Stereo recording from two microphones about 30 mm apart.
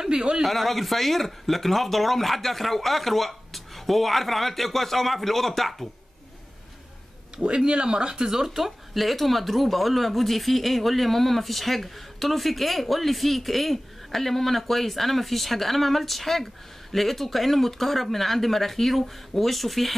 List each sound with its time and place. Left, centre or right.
0.0 s speech: right
0.4 s speech: centre
7.4 s speech: right
8.2 s speech: centre